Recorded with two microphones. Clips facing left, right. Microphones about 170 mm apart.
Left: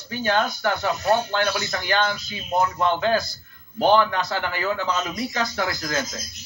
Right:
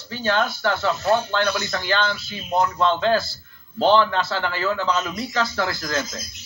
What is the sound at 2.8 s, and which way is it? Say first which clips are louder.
Speech: right 2 dB; 15° left (ahead or behind).